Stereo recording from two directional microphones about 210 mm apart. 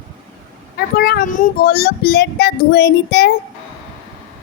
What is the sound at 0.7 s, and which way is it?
A woman's voice, 50° left (ahead or behind).